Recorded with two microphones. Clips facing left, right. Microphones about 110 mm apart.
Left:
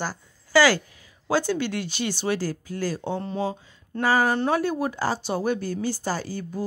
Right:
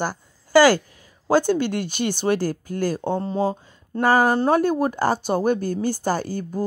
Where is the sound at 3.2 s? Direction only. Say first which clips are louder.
Right 5 dB; 40° right (ahead or behind).